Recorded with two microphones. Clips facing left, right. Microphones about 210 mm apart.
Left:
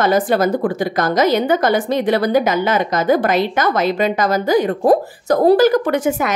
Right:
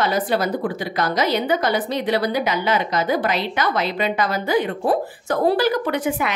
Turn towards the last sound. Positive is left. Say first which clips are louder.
# left 4 dB
turn(degrees=45)  # may be behind; listen again after turning